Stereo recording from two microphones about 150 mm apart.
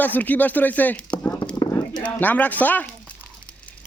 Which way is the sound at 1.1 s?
15° left (ahead or behind).